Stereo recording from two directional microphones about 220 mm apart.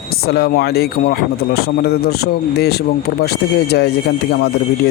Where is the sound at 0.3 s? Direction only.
45° left (ahead or behind).